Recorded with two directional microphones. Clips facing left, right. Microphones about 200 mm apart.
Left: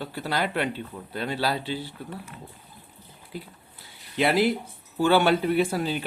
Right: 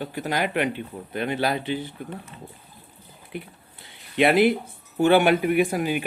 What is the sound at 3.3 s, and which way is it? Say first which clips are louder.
Speech: right 3 dB; 20° right (ahead or behind).